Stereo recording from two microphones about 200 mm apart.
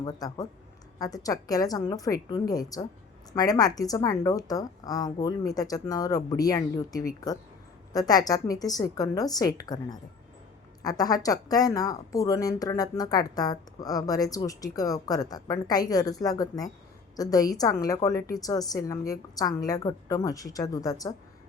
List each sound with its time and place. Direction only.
0.0 s a woman's voice: 20° left (ahead or behind)